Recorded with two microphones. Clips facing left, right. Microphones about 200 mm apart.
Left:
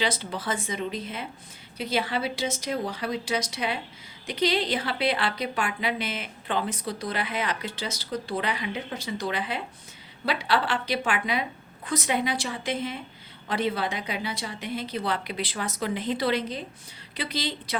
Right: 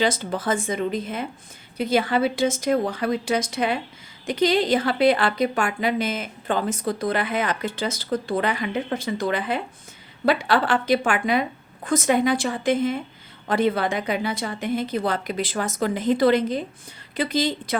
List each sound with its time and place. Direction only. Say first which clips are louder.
0.0 s a woman's voice: right 6 dB; 50° right (ahead or behind)